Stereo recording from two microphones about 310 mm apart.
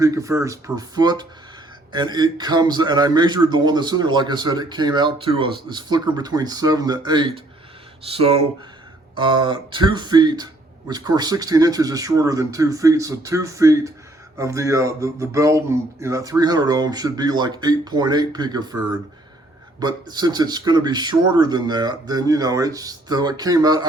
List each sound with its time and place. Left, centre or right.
0.0 s speech: centre
19.8 s speech: centre